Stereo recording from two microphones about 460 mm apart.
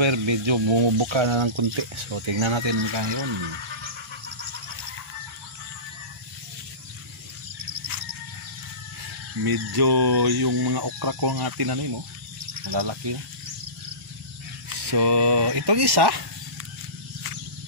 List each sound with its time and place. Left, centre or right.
0.0 s speech: right
9.4 s speech: right
14.9 s speech: right